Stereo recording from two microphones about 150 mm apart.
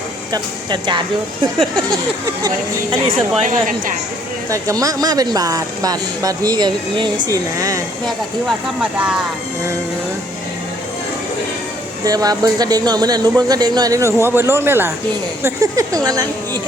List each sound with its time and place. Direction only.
0.3 s speech: 30° right (ahead or behind)
2.9 s speech: 35° right (ahead or behind)
3.4 s speech: 60° right (ahead or behind)
4.4 s speech: 20° right (ahead or behind)
8.0 s speech: 5° left (ahead or behind)
12.0 s speech: 25° right (ahead or behind)